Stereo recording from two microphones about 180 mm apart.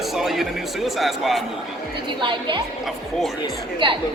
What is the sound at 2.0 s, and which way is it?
Speech, 30° right (ahead or behind).